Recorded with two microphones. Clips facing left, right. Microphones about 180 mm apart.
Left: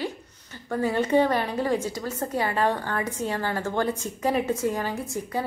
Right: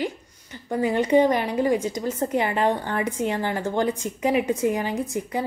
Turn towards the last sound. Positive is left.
turn(degrees=-20)  # may be behind; listen again after turning